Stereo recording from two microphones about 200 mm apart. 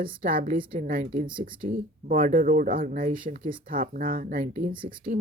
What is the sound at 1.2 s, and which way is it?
Speech, 25° right (ahead or behind).